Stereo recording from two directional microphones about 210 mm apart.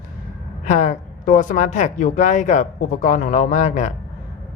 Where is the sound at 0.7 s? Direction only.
35° left (ahead or behind).